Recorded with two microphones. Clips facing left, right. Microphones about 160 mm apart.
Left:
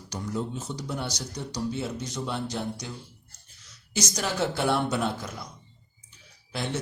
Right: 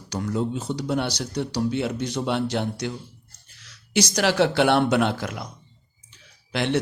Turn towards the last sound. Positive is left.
turn(degrees=-80)